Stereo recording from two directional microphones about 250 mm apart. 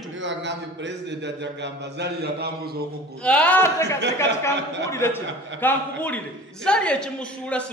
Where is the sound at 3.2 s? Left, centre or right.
Centre.